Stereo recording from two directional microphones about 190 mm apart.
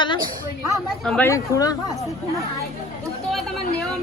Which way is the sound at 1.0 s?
10° left (ahead or behind).